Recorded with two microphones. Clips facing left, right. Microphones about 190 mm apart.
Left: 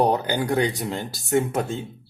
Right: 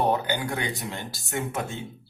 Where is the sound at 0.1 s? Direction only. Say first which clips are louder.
Left 4 dB; 35° left (ahead or behind).